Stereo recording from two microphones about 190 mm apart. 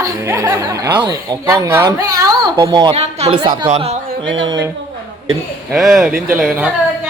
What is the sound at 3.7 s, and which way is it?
Speech, 35° right (ahead or behind).